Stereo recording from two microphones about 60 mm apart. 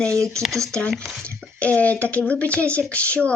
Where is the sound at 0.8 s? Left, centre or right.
Centre.